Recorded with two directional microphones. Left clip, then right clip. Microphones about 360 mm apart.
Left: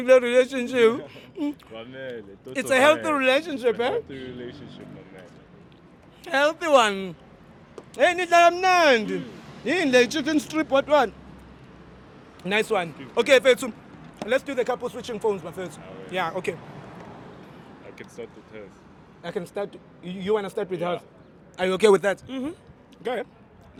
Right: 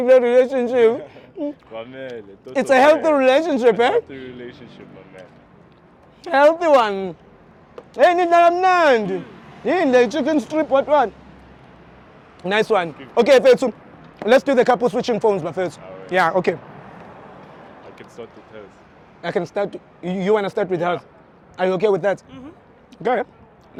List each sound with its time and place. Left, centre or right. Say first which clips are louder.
0.0 s speech: right 4 dB; centre
1.7 s speech: right 4 dB; centre; by 4.0 s right
4.1 s speech: right 2 dB; centre
6.2 s speech: right 8 dB; right
6.7 s speech: right 4 dB; centre
7.9 s speech: right 7 dB; right
8.3 s speech: right 4 dB; centre
12.4 s speech: right 6 dB; centre
14.3 s speech: right 10 dB; right
17.9 s speech: even; centre
19.2 s a man's voice: right 8 dB; right; by 21.8 s centre
21.8 s a man's voice: left 3 dB; centre
22.3 s speech: left 7 dB; left
23.0 s speech: right 9 dB; right